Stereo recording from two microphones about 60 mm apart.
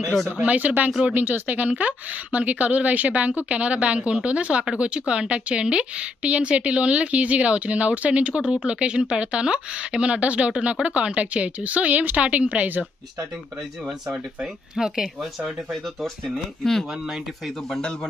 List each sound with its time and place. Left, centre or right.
0.4 s a woman's voice: right
13.8 s speech: centre
16.9 s speech: centre